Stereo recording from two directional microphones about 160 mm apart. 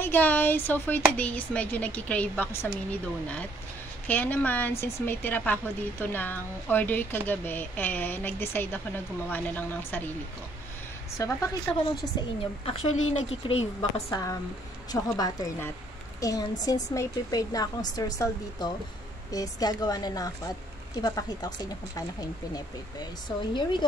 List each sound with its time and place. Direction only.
0.0 s a woman's voice: 10° left (ahead or behind)
11.1 s a woman's voice: 20° left (ahead or behind)
13.5 s a woman's voice: 40° left (ahead or behind)
14.9 s a woman's voice: 25° left (ahead or behind)